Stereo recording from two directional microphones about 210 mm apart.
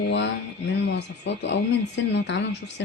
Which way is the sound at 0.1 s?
55° left (ahead or behind).